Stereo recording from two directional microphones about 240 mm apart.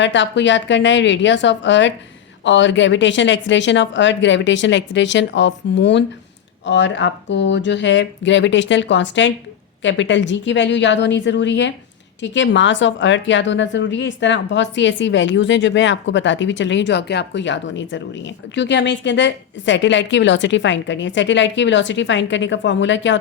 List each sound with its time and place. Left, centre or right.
0.0 s a woman's voice: left